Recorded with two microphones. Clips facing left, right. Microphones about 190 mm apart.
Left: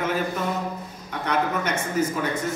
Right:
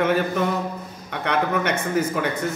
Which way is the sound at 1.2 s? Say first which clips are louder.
Right 2 dB; 65° right (ahead or behind).